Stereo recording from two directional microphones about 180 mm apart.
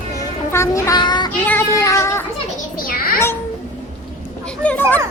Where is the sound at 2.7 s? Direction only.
55° left (ahead or behind).